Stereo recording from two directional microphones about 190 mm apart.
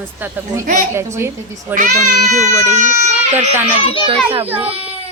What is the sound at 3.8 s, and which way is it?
Speech, 30° left (ahead or behind).